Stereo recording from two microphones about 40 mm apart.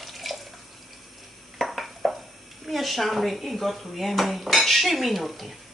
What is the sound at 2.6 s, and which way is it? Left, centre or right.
Speech, centre.